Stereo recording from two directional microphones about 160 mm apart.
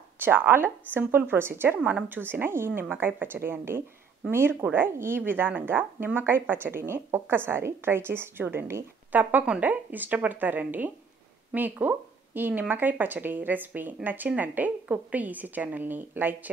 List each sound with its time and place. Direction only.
0.2 s speech: 15° right (ahead or behind)